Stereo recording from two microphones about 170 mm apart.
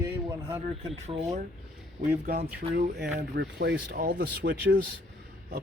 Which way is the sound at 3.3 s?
80° right.